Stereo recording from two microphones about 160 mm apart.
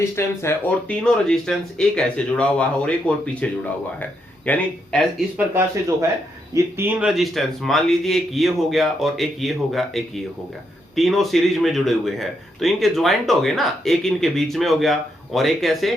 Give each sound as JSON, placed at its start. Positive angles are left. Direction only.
{"t": 0.2, "sound": "a man's voice", "side_deg": 15}
{"t": 6.5, "sound": "a man's voice", "side_deg": -15}
{"t": 7.0, "sound": "a man's voice", "side_deg": 0}